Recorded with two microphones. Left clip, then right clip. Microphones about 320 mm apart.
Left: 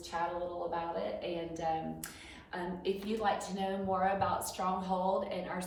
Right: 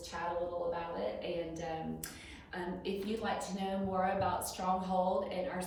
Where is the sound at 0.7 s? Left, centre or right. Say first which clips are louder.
Left 1 dB; centre.